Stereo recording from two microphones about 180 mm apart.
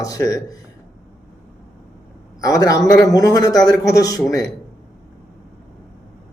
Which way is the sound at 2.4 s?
20° left (ahead or behind).